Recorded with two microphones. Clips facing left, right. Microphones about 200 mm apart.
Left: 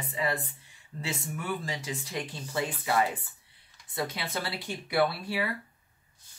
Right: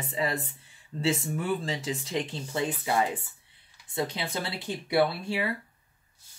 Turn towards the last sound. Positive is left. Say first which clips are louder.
# right 2 dB
turn(degrees=-20)  # may be behind; listen again after turning